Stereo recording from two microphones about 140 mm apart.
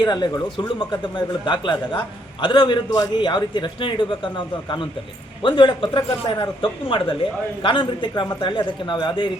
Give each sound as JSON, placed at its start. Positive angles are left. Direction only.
{"t": 0.0, "sound": "a man's voice", "side_deg": 30}